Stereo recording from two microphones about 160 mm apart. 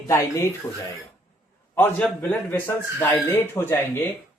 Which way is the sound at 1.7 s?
10° left (ahead or behind).